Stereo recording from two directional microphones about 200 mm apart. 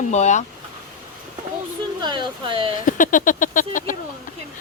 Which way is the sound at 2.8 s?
40° left (ahead or behind).